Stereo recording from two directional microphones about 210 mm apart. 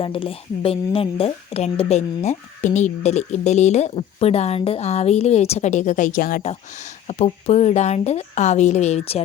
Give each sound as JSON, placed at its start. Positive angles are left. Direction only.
{"t": 0.0, "sound": "speech", "side_deg": 25}